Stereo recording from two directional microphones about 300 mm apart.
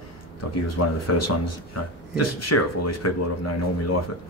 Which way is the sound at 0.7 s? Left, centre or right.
Left.